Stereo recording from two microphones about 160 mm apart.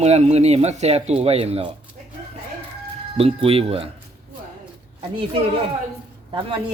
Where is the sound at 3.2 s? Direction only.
35° right (ahead or behind).